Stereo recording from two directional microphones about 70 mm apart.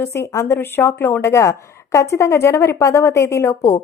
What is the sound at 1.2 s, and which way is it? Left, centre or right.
A woman's voice, left.